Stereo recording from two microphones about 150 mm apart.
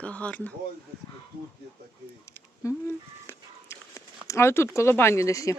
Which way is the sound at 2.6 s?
20° left (ahead or behind).